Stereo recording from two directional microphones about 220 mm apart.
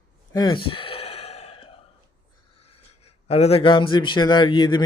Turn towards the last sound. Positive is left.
turn(degrees=20)  # may be behind; listen again after turning